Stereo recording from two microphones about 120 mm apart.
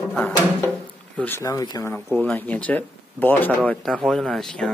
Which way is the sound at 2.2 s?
10° left (ahead or behind).